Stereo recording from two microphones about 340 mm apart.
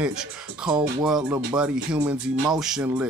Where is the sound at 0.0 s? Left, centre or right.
Centre.